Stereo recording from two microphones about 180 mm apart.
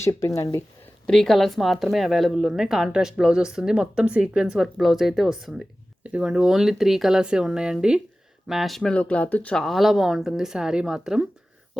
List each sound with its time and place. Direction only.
0.0 s speech: 15° left (ahead or behind)
1.0 s a woman's voice: 5° left (ahead or behind)